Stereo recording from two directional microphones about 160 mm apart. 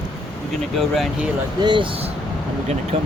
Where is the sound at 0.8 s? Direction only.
Centre (ahead or behind).